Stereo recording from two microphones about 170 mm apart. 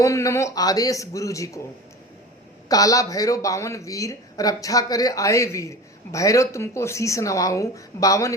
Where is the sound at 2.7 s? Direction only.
20° left (ahead or behind).